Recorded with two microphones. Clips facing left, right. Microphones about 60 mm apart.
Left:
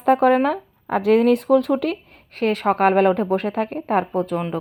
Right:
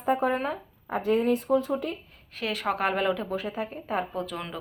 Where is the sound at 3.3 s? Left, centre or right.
Left.